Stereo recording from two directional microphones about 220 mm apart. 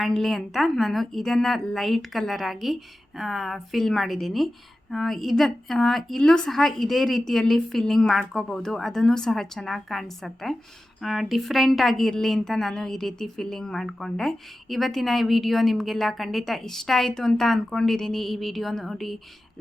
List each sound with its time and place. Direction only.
0.0 s a woman's voice: centre (ahead or behind)